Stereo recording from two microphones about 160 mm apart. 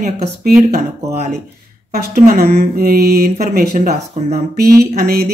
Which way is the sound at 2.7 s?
70° right (ahead or behind).